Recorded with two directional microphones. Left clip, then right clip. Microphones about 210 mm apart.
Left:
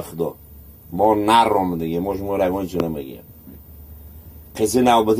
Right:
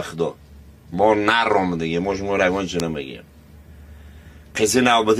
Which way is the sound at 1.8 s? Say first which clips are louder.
Right 1 dB; 5° left (ahead or behind).